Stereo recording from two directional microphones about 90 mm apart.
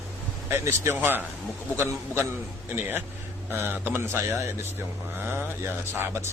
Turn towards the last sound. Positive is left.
turn(degrees=-30)  # may be behind; listen again after turning